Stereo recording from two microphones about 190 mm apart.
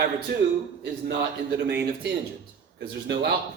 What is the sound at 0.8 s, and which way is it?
A man's voice, 60° right (ahead or behind).